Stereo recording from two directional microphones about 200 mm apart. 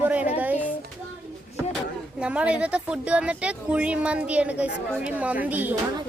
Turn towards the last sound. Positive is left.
turn(degrees=-10)  # may be behind; listen again after turning